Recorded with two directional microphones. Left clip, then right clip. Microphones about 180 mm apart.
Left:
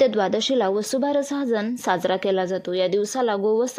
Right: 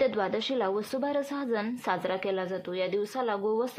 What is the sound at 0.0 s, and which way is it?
A woman's voice, 35° left (ahead or behind).